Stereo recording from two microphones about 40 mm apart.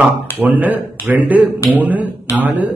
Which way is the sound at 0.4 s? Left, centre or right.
Right.